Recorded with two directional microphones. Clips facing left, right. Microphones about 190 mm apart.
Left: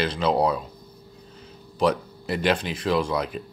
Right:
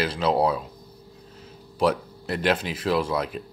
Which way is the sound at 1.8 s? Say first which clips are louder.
Even; centre (ahead or behind).